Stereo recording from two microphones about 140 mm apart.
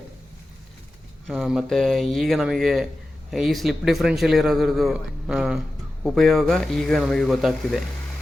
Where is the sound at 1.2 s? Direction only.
Centre (ahead or behind).